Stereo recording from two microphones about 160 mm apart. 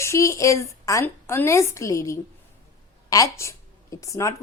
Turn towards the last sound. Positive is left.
turn(degrees=20)  # may be behind; listen again after turning